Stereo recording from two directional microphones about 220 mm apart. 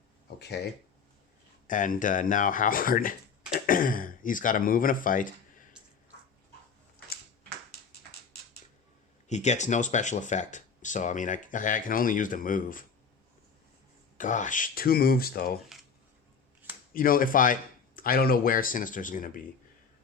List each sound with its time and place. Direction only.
0.3 s speech: 50° left (ahead or behind)
1.6 s speech: 35° left (ahead or behind)
9.3 s speech: 30° left (ahead or behind)
14.2 s speech: 35° left (ahead or behind)
16.9 s speech: 40° left (ahead or behind)